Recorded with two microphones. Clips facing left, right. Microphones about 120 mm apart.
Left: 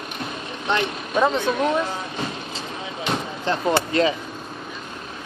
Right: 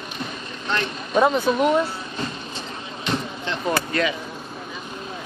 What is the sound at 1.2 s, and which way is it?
Speech, 10° right (ahead or behind).